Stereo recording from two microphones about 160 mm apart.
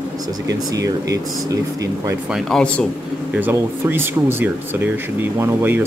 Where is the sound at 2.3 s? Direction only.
5° left (ahead or behind).